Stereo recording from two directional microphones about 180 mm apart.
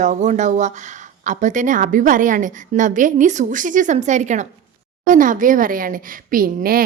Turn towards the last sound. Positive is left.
turn(degrees=-55)  # may be behind; listen again after turning